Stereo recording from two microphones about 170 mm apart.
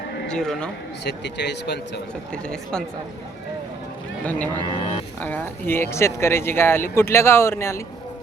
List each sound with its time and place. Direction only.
0.3 s speech: 5° left (ahead or behind)
1.0 s speech: 90° left
2.3 s speech: 5° left (ahead or behind)
4.3 s speech: 10° left (ahead or behind)